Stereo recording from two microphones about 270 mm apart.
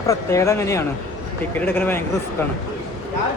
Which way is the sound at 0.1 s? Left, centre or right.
Centre.